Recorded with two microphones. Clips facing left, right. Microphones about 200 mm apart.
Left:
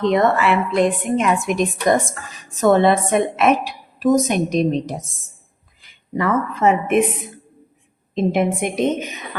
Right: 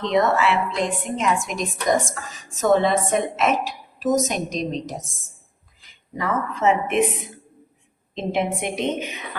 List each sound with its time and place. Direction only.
0.0 s a woman's voice: 55° left (ahead or behind)
6.1 s a woman's voice: 60° left (ahead or behind)
8.1 s a woman's voice: 50° left (ahead or behind)